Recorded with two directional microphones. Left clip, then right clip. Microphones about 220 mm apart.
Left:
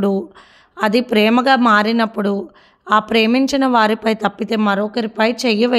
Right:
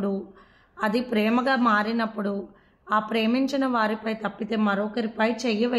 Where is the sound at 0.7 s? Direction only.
40° left (ahead or behind).